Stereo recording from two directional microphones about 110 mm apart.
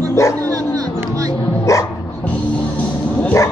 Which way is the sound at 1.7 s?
25° left (ahead or behind).